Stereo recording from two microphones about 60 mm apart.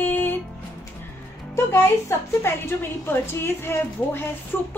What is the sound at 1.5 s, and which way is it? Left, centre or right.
A woman's voice, left.